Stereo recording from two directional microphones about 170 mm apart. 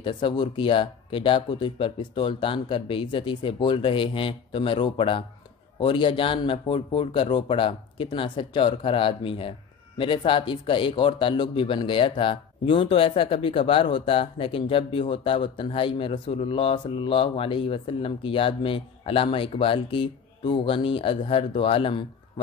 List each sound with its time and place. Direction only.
0.0 s a man's voice: 25° left (ahead or behind)